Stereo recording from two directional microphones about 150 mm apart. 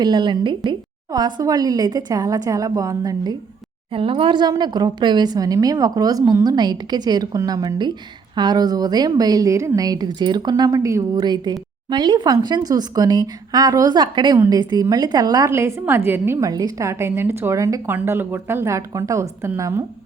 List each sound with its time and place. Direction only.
0.0 s a woman's voice: 30° right (ahead or behind)
3.9 s a woman's voice: 35° right (ahead or behind); by 19.8 s 20° right (ahead or behind)